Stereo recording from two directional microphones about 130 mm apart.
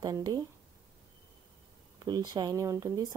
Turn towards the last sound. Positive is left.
turn(degrees=-25)  # may be behind; listen again after turning